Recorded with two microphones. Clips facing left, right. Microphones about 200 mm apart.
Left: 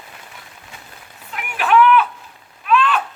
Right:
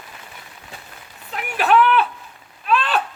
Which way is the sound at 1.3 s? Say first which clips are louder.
Even; 35° right (ahead or behind).